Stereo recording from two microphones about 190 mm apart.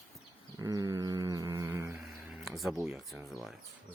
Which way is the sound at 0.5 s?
20° right (ahead or behind).